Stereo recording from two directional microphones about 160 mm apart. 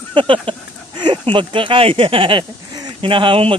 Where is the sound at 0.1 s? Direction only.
30° right (ahead or behind).